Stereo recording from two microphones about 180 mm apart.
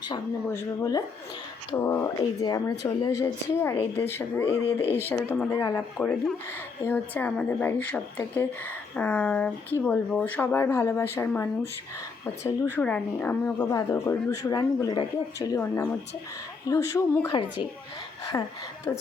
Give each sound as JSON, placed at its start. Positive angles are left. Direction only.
{"t": 0.4, "sound": "a woman's voice", "side_deg": 15}
{"t": 4.6, "sound": "speech", "side_deg": 35}
{"t": 4.9, "sound": "a woman's voice", "side_deg": 10}
{"t": 12.7, "sound": "a woman's voice", "side_deg": 10}
{"t": 18.3, "sound": "a woman's voice", "side_deg": 15}